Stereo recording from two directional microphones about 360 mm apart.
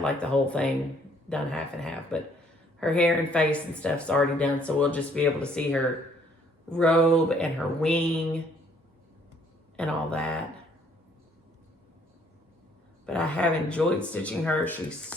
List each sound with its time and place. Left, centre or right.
0.0 s speech: centre
9.7 s speech: centre
13.1 s speech: centre